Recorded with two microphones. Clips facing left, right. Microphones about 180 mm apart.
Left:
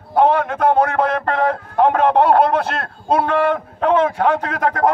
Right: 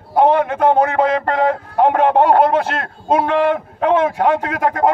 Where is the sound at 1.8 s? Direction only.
15° right (ahead or behind).